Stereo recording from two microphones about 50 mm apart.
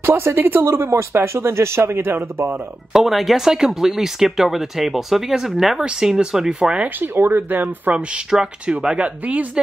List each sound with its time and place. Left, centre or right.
0.0 s speech: right
2.9 s speech: centre
6.8 s speech: right
8.3 s speech: centre